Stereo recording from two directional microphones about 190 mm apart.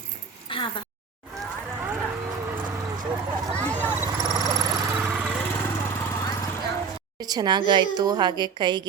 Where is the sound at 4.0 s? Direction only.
15° right (ahead or behind).